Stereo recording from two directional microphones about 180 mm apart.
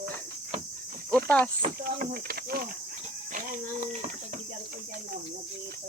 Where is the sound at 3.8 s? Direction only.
40° right (ahead or behind).